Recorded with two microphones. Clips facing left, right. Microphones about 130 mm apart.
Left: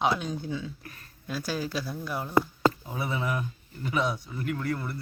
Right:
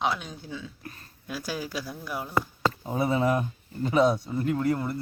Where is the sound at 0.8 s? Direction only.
30° right (ahead or behind).